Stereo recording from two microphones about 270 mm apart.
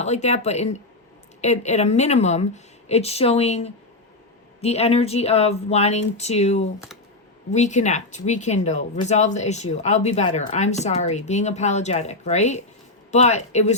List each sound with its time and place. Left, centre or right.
0.0 s speech: left